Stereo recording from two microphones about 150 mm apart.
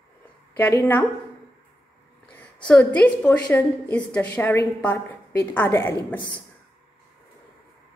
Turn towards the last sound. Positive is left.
turn(degrees=35)  # may be behind; listen again after turning